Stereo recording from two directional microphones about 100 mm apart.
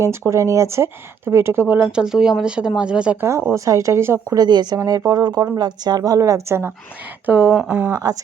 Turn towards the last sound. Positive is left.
turn(degrees=-20)  # may be behind; listen again after turning